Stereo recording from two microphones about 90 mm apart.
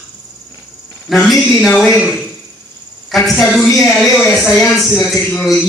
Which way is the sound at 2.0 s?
Centre (ahead or behind).